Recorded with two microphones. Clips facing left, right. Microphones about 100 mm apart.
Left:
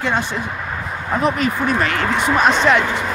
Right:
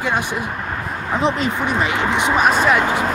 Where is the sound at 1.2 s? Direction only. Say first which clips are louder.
Left 1 dB; 20° right (ahead or behind).